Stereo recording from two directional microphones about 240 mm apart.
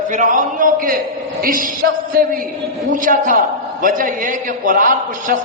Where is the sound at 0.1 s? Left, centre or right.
Right.